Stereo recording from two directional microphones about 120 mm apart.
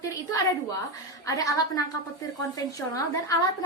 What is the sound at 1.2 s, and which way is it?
A woman's voice, 30° left (ahead or behind).